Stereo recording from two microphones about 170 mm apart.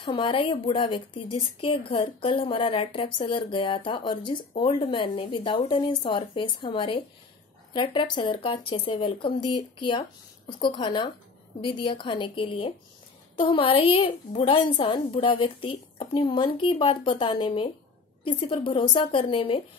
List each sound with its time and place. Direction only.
0.0 s a woman's voice: 30° left (ahead or behind)